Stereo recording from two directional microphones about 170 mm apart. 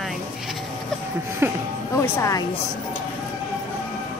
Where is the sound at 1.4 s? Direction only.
15° right (ahead or behind).